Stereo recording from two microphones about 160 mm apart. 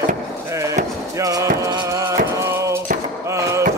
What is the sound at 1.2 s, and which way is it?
Music, 20° right (ahead or behind).